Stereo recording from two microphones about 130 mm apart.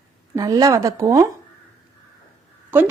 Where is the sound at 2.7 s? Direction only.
15° right (ahead or behind).